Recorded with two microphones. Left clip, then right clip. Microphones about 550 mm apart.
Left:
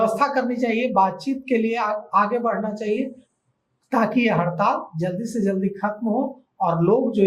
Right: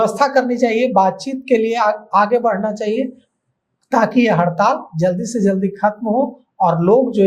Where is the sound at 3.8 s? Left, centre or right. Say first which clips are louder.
Right 6 dB; right.